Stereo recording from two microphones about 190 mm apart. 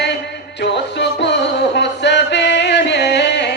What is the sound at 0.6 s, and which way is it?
Music, 65° left (ahead or behind).